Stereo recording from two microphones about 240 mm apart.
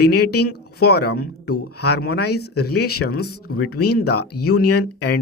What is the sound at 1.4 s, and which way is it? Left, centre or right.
Speech, left.